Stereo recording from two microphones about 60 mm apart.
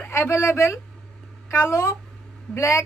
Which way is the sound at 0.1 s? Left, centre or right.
Left.